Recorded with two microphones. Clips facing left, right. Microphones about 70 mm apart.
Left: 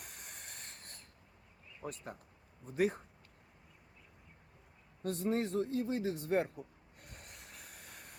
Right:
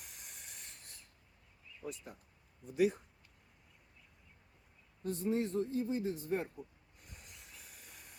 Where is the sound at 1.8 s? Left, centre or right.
Left.